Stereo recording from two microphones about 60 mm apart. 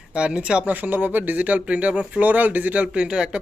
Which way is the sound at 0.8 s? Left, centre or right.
Right.